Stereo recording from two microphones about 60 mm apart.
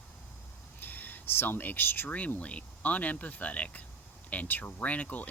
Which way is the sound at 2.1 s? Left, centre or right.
Left.